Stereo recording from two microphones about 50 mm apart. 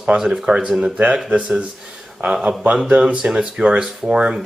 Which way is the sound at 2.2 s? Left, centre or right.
Right.